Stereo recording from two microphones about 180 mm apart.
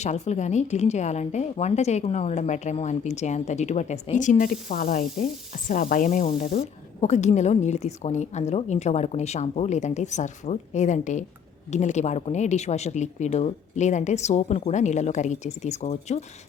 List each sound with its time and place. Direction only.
0.0 s a woman's voice: 40° left (ahead or behind)